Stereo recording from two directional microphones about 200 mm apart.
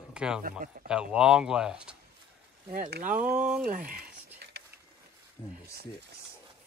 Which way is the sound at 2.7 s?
40° right (ahead or behind).